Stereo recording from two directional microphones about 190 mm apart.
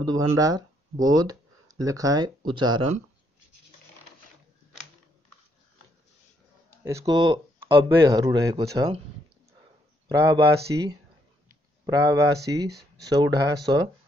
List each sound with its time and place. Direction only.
0.0 s speech: 20° right (ahead or behind)
6.8 s speech: 15° right (ahead or behind)
10.0 s speech: 25° right (ahead or behind)